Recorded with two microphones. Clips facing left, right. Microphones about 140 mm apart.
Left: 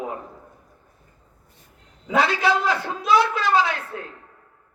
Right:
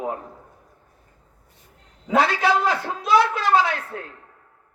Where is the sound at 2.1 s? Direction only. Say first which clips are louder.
Right 1 dB; 50° right (ahead or behind).